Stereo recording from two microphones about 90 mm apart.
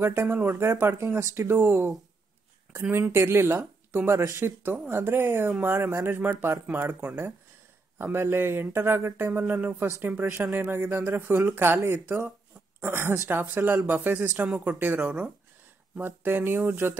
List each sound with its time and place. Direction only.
0.0 s a woman's voice: 25° right (ahead or behind)